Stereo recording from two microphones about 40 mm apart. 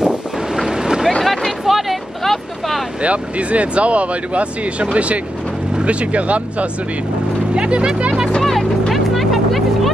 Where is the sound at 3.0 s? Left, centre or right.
Right.